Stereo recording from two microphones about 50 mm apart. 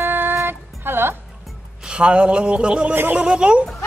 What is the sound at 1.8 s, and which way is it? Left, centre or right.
Speech, right.